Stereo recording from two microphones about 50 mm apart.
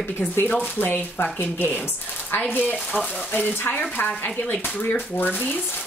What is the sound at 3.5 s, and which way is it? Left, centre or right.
Speech, left.